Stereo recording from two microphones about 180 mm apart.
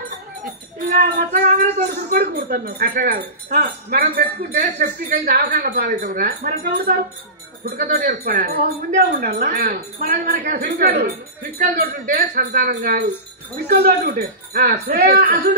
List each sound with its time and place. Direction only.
1.1 s a woman's voice: 50° right (ahead or behind)